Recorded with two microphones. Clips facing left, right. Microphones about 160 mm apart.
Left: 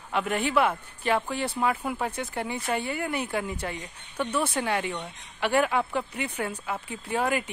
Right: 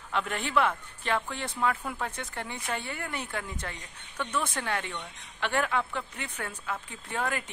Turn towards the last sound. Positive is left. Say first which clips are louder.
# left 6 dB
turn(degrees=10)  # may be behind; listen again after turning